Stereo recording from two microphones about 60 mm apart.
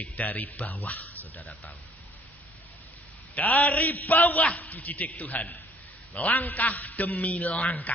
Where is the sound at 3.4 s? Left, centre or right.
Left.